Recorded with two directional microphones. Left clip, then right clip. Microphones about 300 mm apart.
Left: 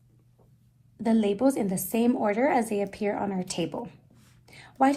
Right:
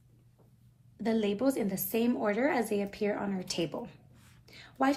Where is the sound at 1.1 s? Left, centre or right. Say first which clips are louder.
Left 5 dB; centre.